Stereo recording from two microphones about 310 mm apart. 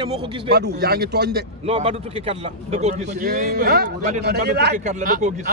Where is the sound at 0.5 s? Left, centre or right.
Right.